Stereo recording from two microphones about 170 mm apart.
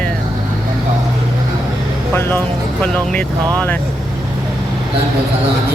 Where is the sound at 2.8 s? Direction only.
5° left (ahead or behind).